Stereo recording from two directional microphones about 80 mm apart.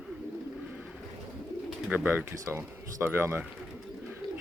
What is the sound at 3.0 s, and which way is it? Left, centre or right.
Speech, right.